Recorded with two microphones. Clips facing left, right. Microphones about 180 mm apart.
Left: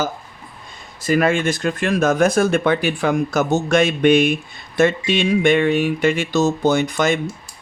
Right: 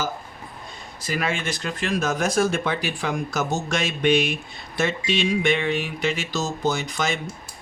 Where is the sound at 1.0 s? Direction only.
50° left (ahead or behind).